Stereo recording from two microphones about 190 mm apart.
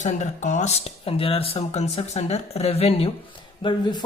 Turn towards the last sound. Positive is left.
turn(degrees=25)  # may be behind; listen again after turning